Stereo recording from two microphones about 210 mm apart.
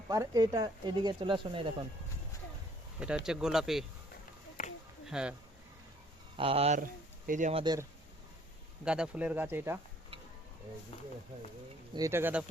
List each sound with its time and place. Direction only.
0.1 s speech: 15° right (ahead or behind)
3.2 s speech: 5° right (ahead or behind)
4.6 s a sound: 40° left (ahead or behind)
5.0 s speech: 5° right (ahead or behind)
6.3 s speech: 25° right (ahead or behind)
7.6 s speech: 20° right (ahead or behind)
8.8 s speech: 5° right (ahead or behind)
11.9 s speech: 15° right (ahead or behind)